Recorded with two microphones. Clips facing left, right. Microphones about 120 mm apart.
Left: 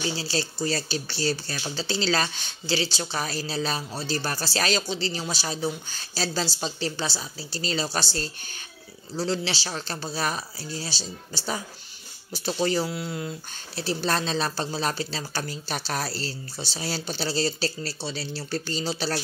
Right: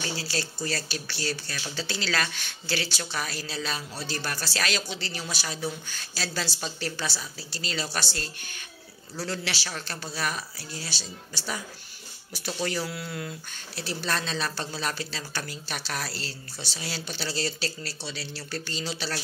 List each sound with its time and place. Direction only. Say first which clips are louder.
0.1 s speech: left 3 dB; 25° left (ahead or behind)
13.7 s speech: left 5 dB; 35° left (ahead or behind)